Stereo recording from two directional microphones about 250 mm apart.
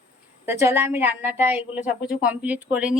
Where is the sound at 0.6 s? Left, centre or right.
Centre.